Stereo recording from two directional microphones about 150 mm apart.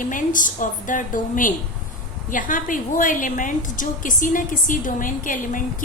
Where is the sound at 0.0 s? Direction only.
60° left (ahead or behind).